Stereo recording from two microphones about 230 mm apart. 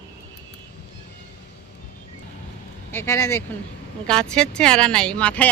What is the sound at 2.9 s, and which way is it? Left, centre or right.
Speech, centre.